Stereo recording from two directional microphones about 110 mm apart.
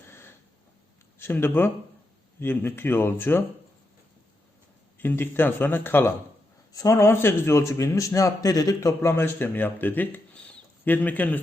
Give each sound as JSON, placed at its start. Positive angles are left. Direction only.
{"t": 0.1, "sound": "a sound", "side_deg": 20}
{"t": 1.2, "sound": "a man's voice", "side_deg": 20}
{"t": 4.9, "sound": "a man's voice", "side_deg": 20}
{"t": 9.0, "sound": "speech", "side_deg": 20}